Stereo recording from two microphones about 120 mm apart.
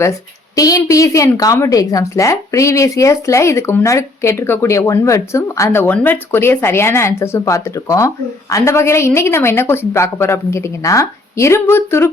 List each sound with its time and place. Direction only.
0.0 s a woman's voice: 25° left (ahead or behind)